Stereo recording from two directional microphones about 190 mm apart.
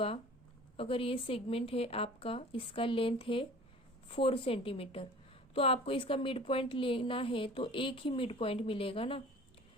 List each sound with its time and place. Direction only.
0.8 s a woman's voice: 30° left (ahead or behind)